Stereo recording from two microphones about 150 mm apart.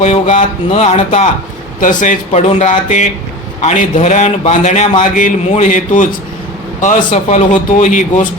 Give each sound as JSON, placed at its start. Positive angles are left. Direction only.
{"t": 0.0, "sound": "a man's voice", "side_deg": 45}
{"t": 1.8, "sound": "a man's voice", "side_deg": 60}